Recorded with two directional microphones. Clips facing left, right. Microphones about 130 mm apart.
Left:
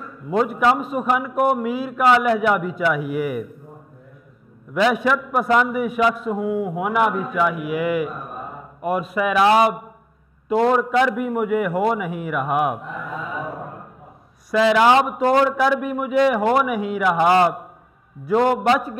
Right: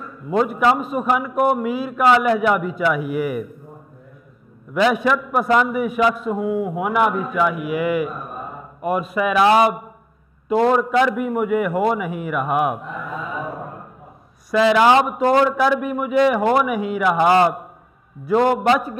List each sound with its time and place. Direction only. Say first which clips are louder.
0.0 s a man's voice: right 1 dB; 20° right (ahead or behind)
4.7 s a man's voice: right 1 dB; 15° right (ahead or behind)